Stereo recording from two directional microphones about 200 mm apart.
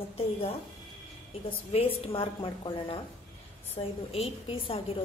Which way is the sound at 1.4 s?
30° left (ahead or behind).